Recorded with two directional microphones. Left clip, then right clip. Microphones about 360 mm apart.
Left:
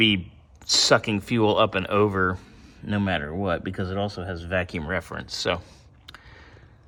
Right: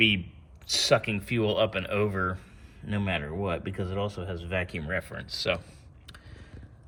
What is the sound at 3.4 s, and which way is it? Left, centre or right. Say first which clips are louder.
Speech: left 5 dB; centre.